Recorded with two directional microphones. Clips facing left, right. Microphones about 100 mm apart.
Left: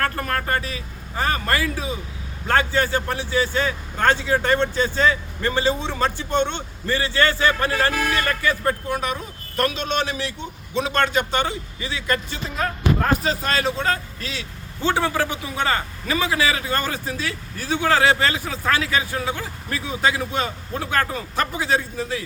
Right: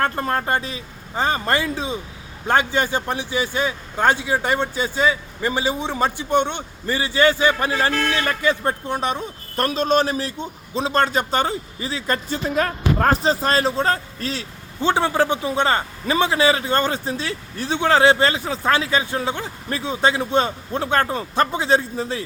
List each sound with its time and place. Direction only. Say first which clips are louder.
0.0 s a man's voice: right 3 dB; 25° right (ahead or behind)
12.5 s speech: right 1 dB; 60° right (ahead or behind)
13.1 s speech: right 3 dB; 35° right (ahead or behind)
14.8 s a man's voice: right 3 dB; 20° right (ahead or behind)